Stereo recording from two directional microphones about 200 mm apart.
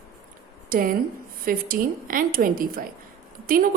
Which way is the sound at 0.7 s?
45° right (ahead or behind).